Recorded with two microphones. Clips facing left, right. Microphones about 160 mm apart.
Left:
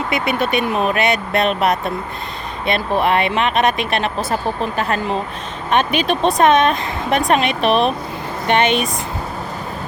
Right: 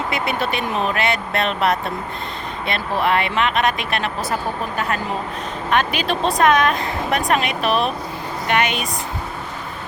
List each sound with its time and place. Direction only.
0.1 s speech: 15° left (ahead or behind)
5.7 s speech: 20° left (ahead or behind)